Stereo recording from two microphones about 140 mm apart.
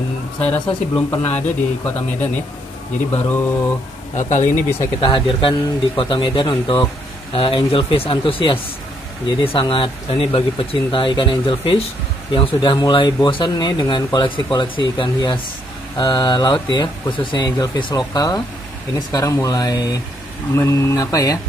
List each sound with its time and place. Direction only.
0.4 s speech: 10° left (ahead or behind)
4.1 s speech: 60° left (ahead or behind)
5.0 s speech: 35° left (ahead or behind)